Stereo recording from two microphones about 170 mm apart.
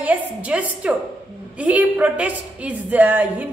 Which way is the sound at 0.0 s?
10° right (ahead or behind).